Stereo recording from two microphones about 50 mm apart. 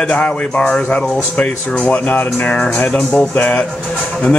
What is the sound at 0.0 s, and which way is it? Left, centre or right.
Speech, left.